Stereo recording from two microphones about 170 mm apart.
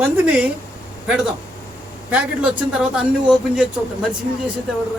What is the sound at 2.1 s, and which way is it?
Speech, 5° right (ahead or behind).